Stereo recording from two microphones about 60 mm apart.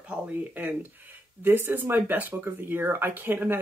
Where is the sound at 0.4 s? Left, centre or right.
Right.